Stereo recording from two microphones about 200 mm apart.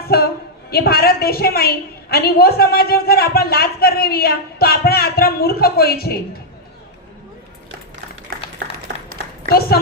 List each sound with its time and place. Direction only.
0.1 s a woman's voice: 50° left (ahead or behind)
9.5 s a woman's voice: 50° left (ahead or behind)